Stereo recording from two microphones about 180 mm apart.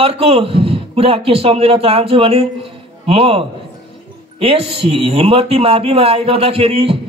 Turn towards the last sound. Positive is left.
turn(degrees=-30)  # may be behind; listen again after turning